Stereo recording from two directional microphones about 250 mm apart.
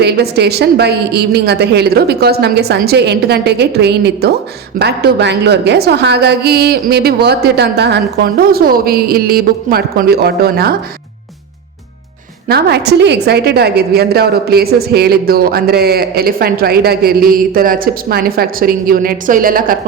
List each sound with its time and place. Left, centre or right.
0.0 s a woman's voice: right
12.5 s a woman's voice: right